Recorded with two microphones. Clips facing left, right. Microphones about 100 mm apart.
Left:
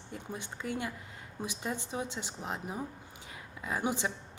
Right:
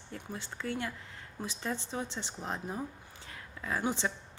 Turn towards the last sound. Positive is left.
turn(degrees=15)  # may be behind; listen again after turning